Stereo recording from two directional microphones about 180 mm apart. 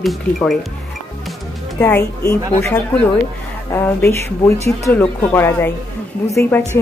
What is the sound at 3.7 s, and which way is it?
Speech, 15° left (ahead or behind).